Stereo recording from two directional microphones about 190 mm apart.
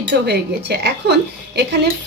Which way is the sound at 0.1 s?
60° right (ahead or behind).